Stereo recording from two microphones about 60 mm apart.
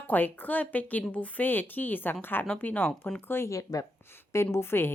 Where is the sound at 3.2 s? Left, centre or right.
Left.